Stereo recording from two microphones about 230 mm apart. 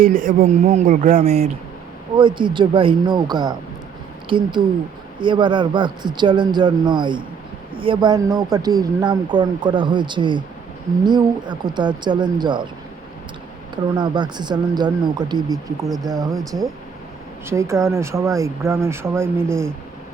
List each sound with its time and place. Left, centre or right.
0.0 s speech: right; by 12.6 s centre
13.9 s speech: centre
17.4 s speech: centre